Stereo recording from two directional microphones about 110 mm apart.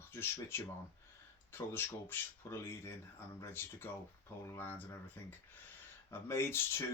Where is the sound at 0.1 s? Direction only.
20° left (ahead or behind).